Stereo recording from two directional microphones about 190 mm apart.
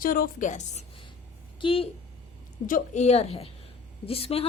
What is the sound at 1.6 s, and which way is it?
Speech, 30° left (ahead or behind).